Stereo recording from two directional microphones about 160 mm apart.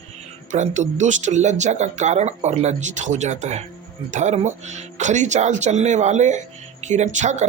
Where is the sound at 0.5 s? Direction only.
50° right (ahead or behind).